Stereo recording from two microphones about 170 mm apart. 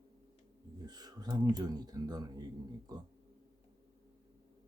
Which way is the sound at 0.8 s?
25° right (ahead or behind).